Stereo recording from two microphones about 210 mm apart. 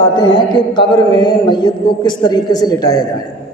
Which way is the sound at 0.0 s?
25° left (ahead or behind).